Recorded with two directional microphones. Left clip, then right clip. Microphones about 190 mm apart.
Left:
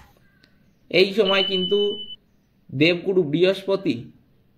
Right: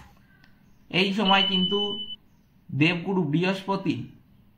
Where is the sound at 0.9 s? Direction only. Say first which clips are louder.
Left 4 dB; 30° left (ahead or behind).